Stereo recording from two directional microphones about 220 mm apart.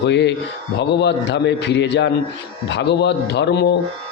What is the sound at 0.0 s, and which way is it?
A man's voice, 50° left (ahead or behind).